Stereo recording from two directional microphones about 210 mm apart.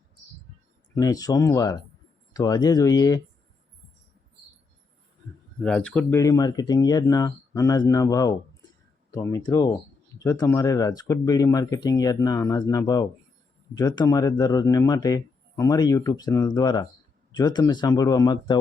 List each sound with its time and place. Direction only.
0.9 s speech: 15° left (ahead or behind)
5.6 s speech: 5° left (ahead or behind); by 18.6 s 20° left (ahead or behind)